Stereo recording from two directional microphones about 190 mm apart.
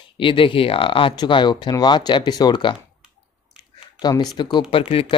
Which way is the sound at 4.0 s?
20° left (ahead or behind).